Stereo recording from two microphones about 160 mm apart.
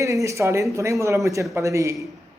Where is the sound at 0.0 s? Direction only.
20° right (ahead or behind).